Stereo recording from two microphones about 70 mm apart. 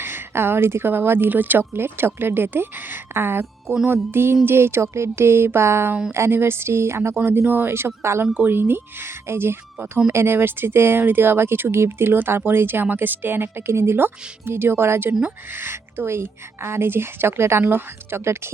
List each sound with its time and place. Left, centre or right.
0.0 s a woman's voice: right
8.3 s a woman's voice: right